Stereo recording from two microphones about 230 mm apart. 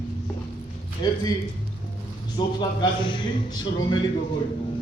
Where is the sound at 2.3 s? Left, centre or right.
Centre.